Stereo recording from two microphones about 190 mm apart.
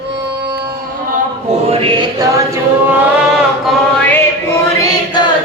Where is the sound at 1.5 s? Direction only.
30° right (ahead or behind).